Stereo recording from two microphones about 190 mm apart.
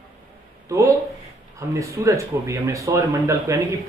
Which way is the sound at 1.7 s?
15° right (ahead or behind).